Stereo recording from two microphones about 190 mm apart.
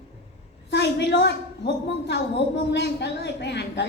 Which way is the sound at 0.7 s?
65° left (ahead or behind).